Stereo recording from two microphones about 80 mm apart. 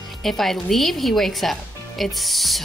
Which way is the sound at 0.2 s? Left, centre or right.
Centre.